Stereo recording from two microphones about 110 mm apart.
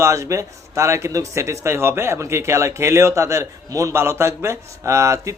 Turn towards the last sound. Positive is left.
turn(degrees=-30)  # may be behind; listen again after turning